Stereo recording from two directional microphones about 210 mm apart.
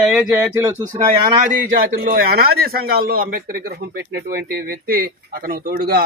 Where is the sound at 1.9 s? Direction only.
45° right (ahead or behind).